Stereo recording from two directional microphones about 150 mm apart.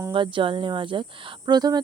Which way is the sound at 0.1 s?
35° right (ahead or behind).